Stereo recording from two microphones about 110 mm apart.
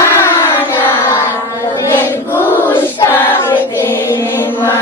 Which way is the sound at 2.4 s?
20° left (ahead or behind).